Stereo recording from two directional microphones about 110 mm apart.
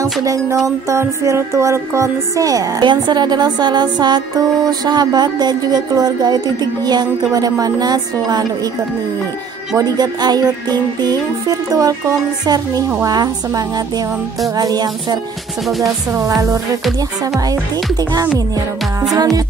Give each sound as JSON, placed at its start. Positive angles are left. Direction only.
{"t": 0.0, "sound": "music", "side_deg": -30}
{"t": 9.8, "sound": "music", "side_deg": -35}
{"t": 14.6, "sound": "music", "side_deg": -35}
{"t": 19.1, "sound": "music", "side_deg": -35}